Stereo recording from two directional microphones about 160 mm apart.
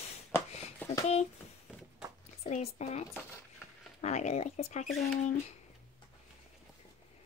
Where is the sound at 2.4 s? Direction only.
40° left (ahead or behind).